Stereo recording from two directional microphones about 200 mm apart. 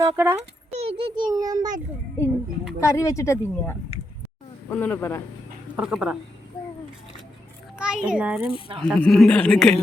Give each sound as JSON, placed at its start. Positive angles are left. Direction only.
{"t": 0.0, "sound": "a child's voice", "side_deg": -15}
{"t": 0.3, "sound": "a child's voice", "side_deg": -30}
{"t": 2.8, "sound": "a woman's voice", "side_deg": 15}
{"t": 5.7, "sound": "speech", "side_deg": -5}
{"t": 7.8, "sound": "a child's voice", "side_deg": -5}